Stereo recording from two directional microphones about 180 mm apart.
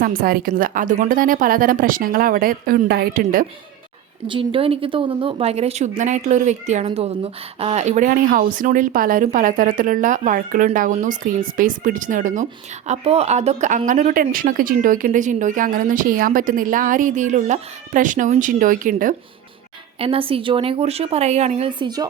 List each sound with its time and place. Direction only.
0.0 s speech: 55° right (ahead or behind)
4.3 s a woman's voice: 30° right (ahead or behind); by 19.1 s 50° right (ahead or behind)
20.0 s a woman's voice: 30° right (ahead or behind)